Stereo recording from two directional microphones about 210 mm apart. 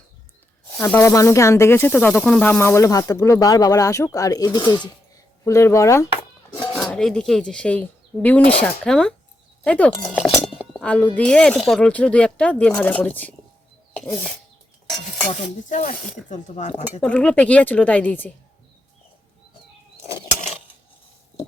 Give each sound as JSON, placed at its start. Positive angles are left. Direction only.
{"t": 0.8, "sound": "speech", "side_deg": 10}
{"t": 6.6, "sound": "speech", "side_deg": 0}
{"t": 15.3, "sound": "speech", "side_deg": 35}
{"t": 17.0, "sound": "speech", "side_deg": 5}